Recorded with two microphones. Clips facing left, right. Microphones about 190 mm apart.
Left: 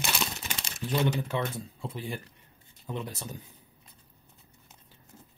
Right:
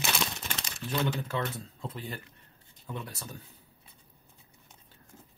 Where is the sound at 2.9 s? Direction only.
20° left (ahead or behind).